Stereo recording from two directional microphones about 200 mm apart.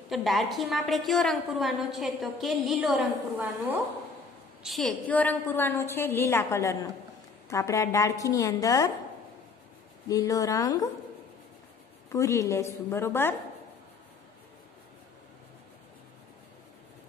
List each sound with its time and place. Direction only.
0.1 s a woman's voice: centre (ahead or behind)
4.6 s a woman's voice: centre (ahead or behind); by 8.9 s 15° left (ahead or behind)
10.0 s a woman's voice: 15° left (ahead or behind)
12.1 s a woman's voice: 15° left (ahead or behind)